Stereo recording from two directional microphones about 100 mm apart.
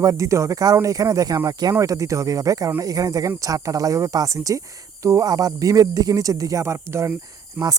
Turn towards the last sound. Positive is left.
turn(degrees=-20)  # may be behind; listen again after turning